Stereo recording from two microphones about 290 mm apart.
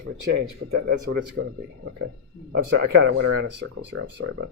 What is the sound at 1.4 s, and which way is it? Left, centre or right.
Speech, right.